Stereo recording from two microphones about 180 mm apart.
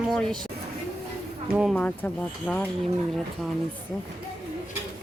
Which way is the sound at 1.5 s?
Centre (ahead or behind).